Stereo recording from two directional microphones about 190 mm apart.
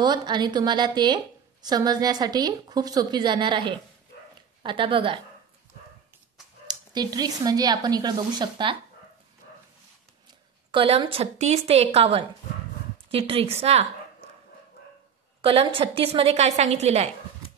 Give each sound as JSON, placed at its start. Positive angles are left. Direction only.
{"t": 0.0, "sound": "a woman's voice", "side_deg": -20}
{"t": 6.7, "sound": "a woman's voice", "side_deg": -20}
{"t": 10.7, "sound": "a woman's voice", "side_deg": -25}
{"t": 15.4, "sound": "a woman's voice", "side_deg": -30}